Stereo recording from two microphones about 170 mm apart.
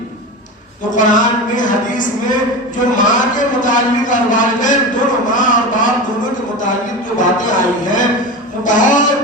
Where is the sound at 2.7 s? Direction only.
50° left (ahead or behind).